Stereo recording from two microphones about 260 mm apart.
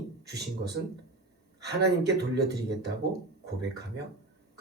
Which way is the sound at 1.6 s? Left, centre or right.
Right.